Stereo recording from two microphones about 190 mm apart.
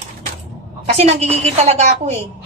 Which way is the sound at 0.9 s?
30° right (ahead or behind).